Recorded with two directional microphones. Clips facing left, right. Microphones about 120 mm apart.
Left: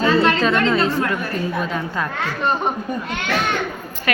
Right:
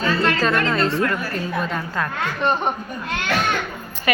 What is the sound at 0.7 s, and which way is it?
Speech, 5° left (ahead or behind).